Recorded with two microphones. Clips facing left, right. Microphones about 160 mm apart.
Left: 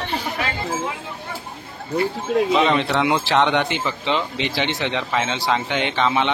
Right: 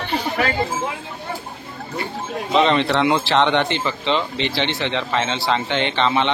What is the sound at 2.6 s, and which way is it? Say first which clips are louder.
Speech: right 2 dB; 5° left (ahead or behind).